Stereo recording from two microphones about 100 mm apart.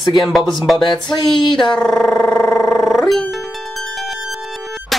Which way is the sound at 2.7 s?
5° left (ahead or behind).